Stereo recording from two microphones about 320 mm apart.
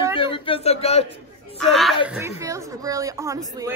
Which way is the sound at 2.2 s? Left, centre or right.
Centre.